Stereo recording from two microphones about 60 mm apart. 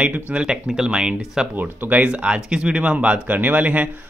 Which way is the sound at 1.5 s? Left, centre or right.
Right.